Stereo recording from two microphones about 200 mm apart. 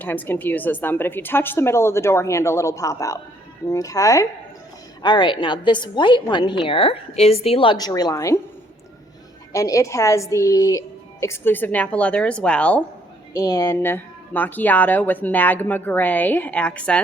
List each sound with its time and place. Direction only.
0.0 s a woman's voice: 10° left (ahead or behind)
9.5 s speech: 15° left (ahead or behind)
13.3 s speech: 20° left (ahead or behind)